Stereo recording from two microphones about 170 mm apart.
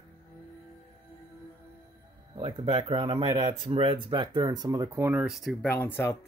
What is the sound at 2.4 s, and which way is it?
Speech, 25° right (ahead or behind).